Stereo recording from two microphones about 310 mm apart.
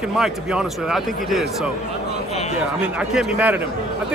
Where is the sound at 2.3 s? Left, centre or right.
Left.